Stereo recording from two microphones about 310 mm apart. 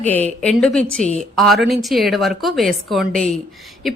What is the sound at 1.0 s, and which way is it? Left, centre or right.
Speech, right.